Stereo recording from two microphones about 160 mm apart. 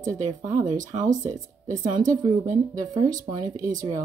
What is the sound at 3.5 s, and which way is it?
Speech, 55° right (ahead or behind).